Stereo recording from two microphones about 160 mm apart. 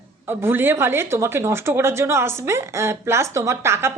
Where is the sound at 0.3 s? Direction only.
15° right (ahead or behind).